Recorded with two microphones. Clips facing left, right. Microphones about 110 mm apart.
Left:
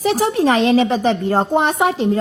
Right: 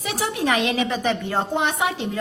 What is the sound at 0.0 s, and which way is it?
A woman's voice, 35° left (ahead or behind).